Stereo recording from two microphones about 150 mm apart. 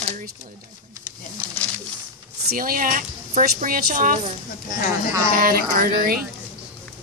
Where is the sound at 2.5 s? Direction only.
70° right (ahead or behind).